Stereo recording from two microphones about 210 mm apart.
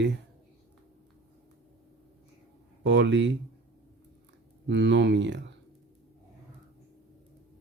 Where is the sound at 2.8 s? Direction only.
55° right (ahead or behind).